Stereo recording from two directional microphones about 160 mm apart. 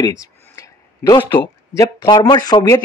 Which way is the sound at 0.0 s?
20° left (ahead or behind).